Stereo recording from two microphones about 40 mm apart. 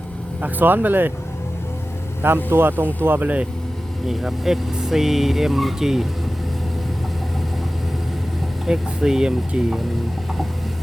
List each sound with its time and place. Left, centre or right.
0.6 s speech: right
2.2 s speech: right
4.0 s speech: centre
8.6 s speech: centre